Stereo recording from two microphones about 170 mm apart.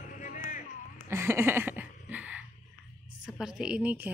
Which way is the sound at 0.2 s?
50° left (ahead or behind).